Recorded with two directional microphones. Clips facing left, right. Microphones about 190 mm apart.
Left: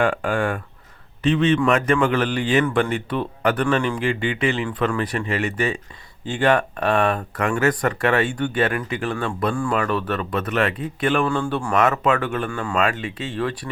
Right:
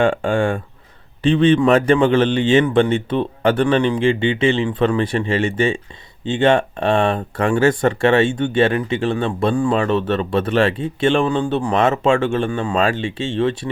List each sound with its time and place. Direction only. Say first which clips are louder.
0.0 s speech: right 4 dB; 25° right (ahead or behind)